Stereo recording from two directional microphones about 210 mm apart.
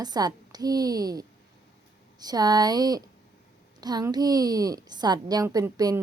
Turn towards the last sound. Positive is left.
turn(degrees=-15)  # may be behind; listen again after turning